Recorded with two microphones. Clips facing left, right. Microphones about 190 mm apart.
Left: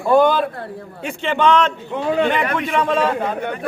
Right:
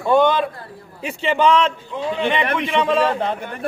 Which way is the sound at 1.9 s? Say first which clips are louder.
Left 5 dB; 60° left (ahead or behind).